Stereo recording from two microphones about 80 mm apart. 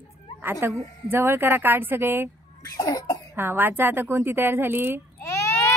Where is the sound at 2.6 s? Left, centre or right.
Left.